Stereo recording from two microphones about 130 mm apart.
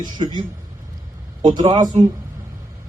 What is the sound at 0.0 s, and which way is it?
Speech, 35° right (ahead or behind).